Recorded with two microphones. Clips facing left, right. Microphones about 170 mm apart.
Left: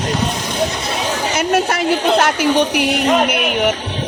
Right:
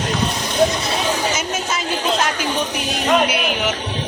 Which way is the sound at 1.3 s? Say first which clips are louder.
Left 8 dB; 60° left (ahead or behind).